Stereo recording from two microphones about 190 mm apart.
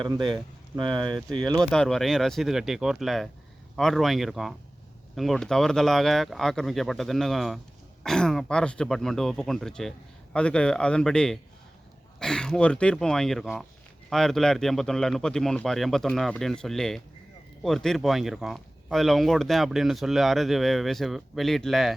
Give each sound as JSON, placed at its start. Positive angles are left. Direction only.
{"t": 0.0, "sound": "speech", "side_deg": -25}
{"t": 1.5, "sound": "speech", "side_deg": 5}